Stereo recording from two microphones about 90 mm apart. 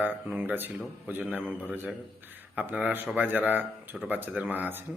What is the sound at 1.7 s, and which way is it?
Speech, 15° right (ahead or behind).